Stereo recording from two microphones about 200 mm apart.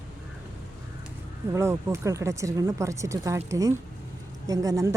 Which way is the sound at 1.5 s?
15° right (ahead or behind).